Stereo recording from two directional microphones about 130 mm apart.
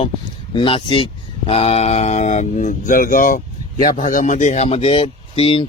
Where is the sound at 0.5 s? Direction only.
40° left (ahead or behind).